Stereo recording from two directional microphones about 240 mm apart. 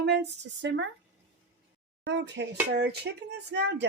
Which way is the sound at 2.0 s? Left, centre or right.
Right.